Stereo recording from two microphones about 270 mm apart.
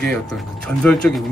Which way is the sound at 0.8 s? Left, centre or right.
Centre.